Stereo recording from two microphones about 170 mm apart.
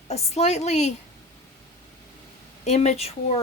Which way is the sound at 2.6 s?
40° left (ahead or behind).